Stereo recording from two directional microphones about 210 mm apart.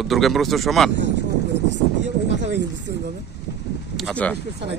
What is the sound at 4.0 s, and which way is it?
Speech, 5° left (ahead or behind).